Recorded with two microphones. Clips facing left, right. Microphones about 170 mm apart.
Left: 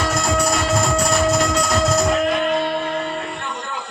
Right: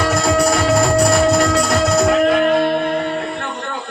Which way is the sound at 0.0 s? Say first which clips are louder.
Right 5 dB; 60° right (ahead or behind).